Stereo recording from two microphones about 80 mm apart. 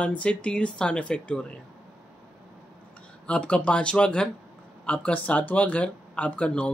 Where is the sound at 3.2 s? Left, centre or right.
Centre.